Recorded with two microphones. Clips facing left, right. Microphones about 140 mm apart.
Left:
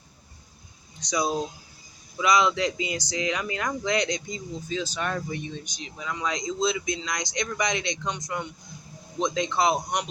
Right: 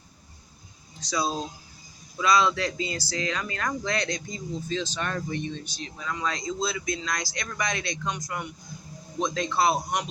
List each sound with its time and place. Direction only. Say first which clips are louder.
1.0 s speech: left 2 dB; 15° left (ahead or behind)